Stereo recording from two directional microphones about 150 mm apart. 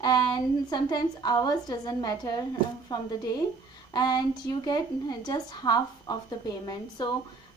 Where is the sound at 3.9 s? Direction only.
25° left (ahead or behind).